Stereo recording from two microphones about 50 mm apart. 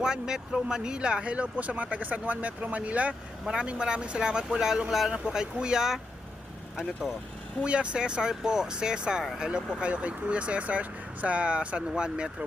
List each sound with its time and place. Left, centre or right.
0.0 s speech: centre
3.4 s speech: centre
7.6 s speech: right